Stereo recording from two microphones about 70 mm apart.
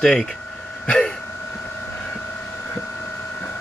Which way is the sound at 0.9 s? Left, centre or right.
Centre.